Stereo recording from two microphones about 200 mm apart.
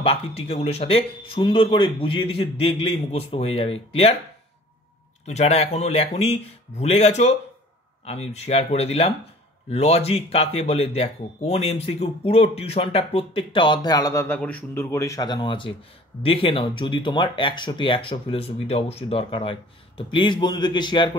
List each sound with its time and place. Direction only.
0.0 s speech: 30° left (ahead or behind)
5.2 s speech: 35° left (ahead or behind)